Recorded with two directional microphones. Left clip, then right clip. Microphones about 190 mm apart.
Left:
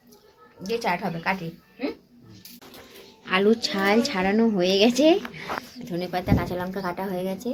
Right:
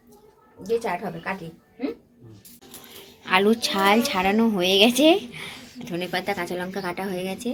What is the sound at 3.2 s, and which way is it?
A woman's voice, 10° right (ahead or behind).